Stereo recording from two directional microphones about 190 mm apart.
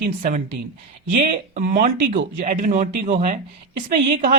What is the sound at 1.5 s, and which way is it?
A woman's voice, 45° right (ahead or behind).